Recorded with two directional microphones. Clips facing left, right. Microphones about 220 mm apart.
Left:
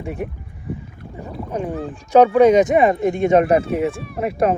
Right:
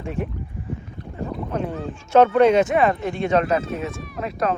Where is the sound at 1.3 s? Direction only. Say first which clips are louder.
Left 2 dB; 10° left (ahead or behind).